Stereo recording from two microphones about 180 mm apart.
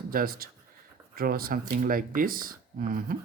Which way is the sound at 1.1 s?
55° right (ahead or behind).